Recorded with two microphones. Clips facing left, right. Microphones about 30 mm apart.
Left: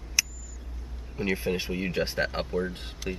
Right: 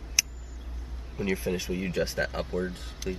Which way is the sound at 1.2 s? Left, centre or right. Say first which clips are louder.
Left 1 dB; left.